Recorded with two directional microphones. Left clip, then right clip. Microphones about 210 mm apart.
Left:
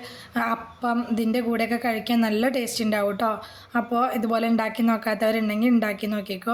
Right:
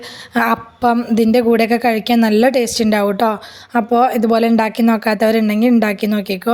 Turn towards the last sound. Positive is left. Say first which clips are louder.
# right 10 dB
turn(degrees=-35)  # may be behind; listen again after turning